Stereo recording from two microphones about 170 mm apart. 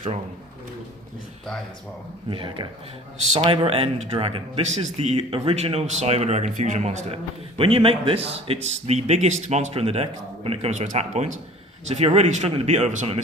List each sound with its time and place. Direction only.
2.3 s a man's voice: 30° right (ahead or behind)